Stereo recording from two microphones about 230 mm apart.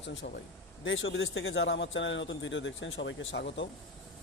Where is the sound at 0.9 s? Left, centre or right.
Left.